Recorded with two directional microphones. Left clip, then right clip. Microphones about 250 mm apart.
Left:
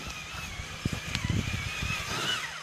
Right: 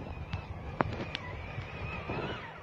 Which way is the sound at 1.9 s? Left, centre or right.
Left.